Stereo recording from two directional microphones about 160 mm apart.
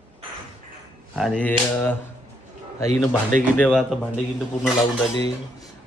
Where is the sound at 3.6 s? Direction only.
Centre (ahead or behind).